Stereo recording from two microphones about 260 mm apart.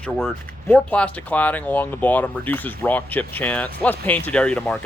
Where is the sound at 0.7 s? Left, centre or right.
Centre.